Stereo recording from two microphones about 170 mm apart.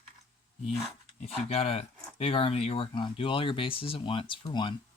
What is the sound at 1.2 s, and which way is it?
Speech, 35° left (ahead or behind).